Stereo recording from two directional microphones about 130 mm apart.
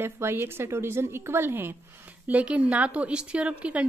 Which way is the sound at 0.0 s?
20° right (ahead or behind).